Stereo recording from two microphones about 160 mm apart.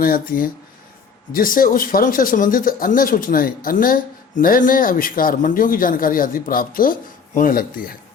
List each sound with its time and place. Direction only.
0.0 s speech: 65° left (ahead or behind)